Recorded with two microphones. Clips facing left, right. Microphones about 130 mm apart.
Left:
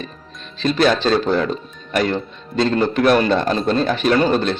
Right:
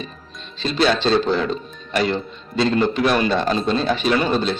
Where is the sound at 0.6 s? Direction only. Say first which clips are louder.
Left 2 dB; 50° left (ahead or behind).